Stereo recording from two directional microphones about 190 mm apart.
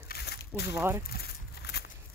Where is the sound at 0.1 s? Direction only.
60° left (ahead or behind).